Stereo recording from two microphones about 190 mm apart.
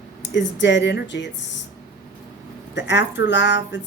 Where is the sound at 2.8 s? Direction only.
65° left (ahead or behind).